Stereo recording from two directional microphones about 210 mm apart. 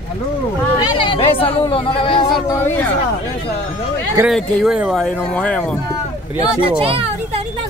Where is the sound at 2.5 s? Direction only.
10° left (ahead or behind).